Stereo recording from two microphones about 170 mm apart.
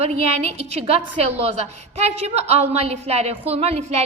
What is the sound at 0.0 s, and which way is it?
A woman's voice, 40° right (ahead or behind).